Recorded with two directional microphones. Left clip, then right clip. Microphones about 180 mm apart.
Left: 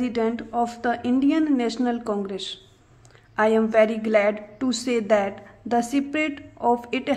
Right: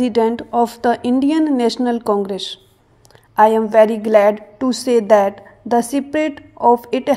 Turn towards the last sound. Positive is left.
turn(degrees=-20)  # may be behind; listen again after turning